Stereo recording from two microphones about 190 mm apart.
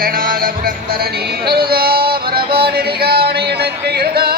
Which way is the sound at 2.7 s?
55° right (ahead or behind).